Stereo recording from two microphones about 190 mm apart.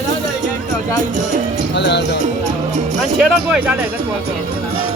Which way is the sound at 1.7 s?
65° left (ahead or behind).